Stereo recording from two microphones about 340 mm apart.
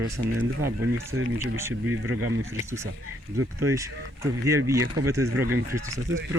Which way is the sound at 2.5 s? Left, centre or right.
Centre.